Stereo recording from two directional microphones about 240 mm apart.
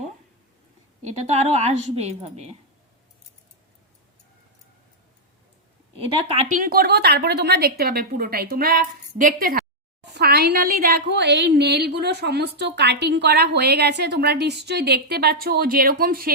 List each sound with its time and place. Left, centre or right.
1.0 s a woman's voice: right
6.1 s a woman's voice: right
6.6 s a woman's voice: right